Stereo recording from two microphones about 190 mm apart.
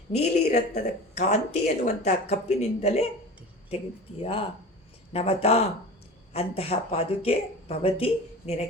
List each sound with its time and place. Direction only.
0.2 s speech: 35° left (ahead or behind)
4.2 s speech: 30° left (ahead or behind)